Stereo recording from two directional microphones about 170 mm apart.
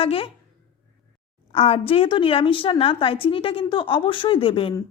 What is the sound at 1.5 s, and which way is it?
A woman's voice, 35° left (ahead or behind).